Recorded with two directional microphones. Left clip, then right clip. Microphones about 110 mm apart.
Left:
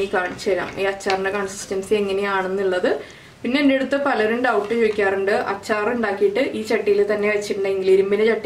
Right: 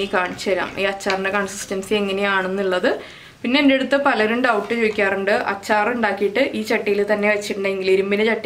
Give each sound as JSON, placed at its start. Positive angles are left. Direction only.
{"t": 0.1, "sound": "speech", "side_deg": -25}